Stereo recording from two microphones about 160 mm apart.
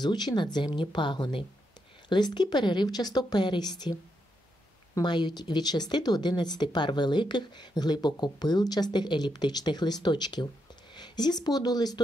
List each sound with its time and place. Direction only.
0.0 s speech: 25° left (ahead or behind)